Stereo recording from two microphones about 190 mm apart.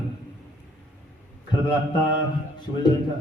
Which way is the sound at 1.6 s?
25° left (ahead or behind).